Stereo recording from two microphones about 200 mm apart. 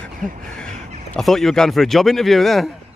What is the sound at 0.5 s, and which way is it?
Speech, 5° left (ahead or behind).